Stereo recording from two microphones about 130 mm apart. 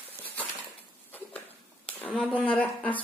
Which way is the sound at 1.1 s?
15° left (ahead or behind).